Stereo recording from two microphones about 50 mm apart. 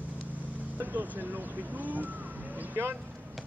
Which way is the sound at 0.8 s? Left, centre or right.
Right.